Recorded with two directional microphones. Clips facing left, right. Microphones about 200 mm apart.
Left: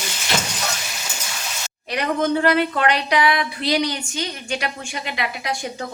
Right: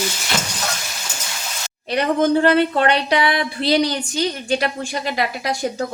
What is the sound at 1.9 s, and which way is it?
A woman's voice, 30° right (ahead or behind).